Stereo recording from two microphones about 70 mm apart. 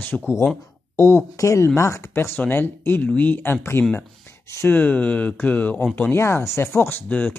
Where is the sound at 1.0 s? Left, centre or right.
Left.